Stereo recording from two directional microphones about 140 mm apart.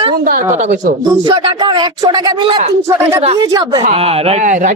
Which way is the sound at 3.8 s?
45° right (ahead or behind).